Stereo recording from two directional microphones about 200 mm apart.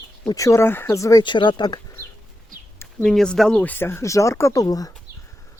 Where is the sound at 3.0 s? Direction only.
Centre (ahead or behind); by 4.9 s 20° left (ahead or behind).